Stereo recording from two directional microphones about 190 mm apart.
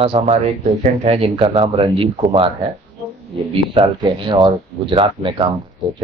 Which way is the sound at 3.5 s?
25° right (ahead or behind).